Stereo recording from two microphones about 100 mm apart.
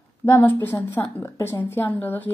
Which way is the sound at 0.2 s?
25° left (ahead or behind).